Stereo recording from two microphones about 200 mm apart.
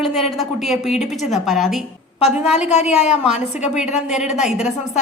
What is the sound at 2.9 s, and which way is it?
Speech, 35° left (ahead or behind).